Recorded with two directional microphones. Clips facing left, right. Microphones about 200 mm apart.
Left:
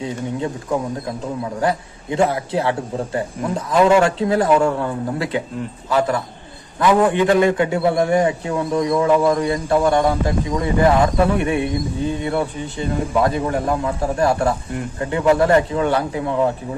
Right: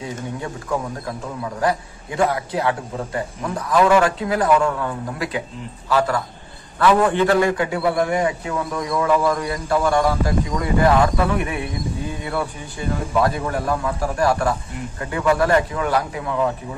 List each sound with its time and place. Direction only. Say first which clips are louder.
0.0 s a man's voice: left 5 dB; 20° left (ahead or behind)